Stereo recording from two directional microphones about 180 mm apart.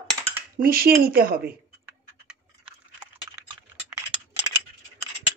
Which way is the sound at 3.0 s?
5° right (ahead or behind).